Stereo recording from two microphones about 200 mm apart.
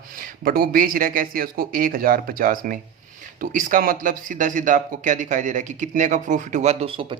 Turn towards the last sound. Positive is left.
turn(degrees=-30)  # may be behind; listen again after turning